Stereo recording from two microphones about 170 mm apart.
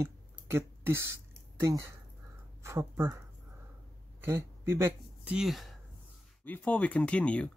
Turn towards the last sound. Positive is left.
turn(degrees=5)  # may be behind; listen again after turning